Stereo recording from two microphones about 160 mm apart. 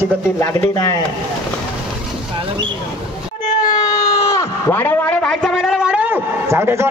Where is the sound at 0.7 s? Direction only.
25° left (ahead or behind).